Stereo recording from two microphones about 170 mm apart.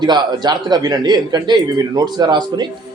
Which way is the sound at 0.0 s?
25° right (ahead or behind).